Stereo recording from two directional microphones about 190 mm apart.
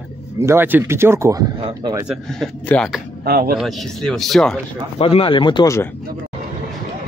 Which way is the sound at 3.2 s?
55° right (ahead or behind).